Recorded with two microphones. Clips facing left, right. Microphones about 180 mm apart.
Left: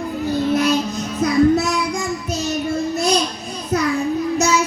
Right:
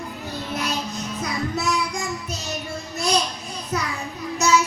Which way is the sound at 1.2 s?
45° left (ahead or behind).